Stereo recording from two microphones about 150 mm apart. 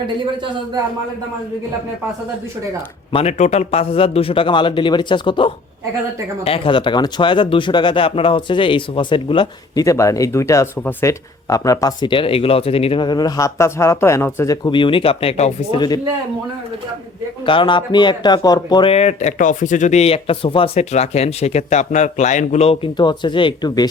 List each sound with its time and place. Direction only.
3.1 s speech: 40° left (ahead or behind)
9.8 s speech: 20° left (ahead or behind); by 15.8 s 45° left (ahead or behind)
17.4 s speech: 35° left (ahead or behind)
18.9 s speech: 50° left (ahead or behind); by 23.9 s 25° left (ahead or behind)